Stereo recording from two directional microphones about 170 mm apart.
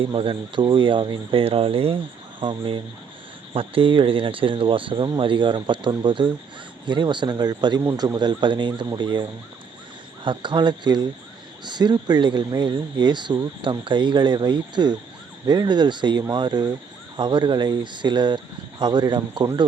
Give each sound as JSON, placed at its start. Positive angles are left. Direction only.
{"t": 0.0, "sound": "speech", "side_deg": -30}